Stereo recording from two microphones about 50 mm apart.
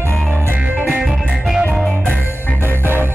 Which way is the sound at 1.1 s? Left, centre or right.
Centre.